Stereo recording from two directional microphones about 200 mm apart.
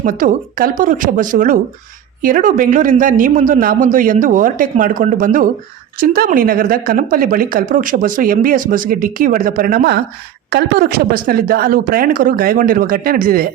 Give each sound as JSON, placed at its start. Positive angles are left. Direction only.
{"t": 0.0, "sound": "a man's voice", "side_deg": -40}